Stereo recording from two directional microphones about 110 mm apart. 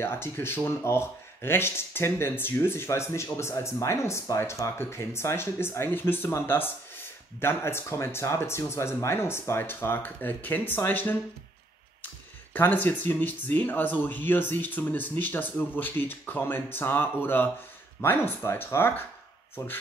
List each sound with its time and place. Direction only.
0.0 s speech: 20° left (ahead or behind)
12.5 s speech: 15° left (ahead or behind)